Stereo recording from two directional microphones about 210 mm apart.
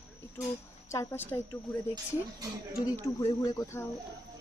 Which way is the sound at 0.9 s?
15° left (ahead or behind).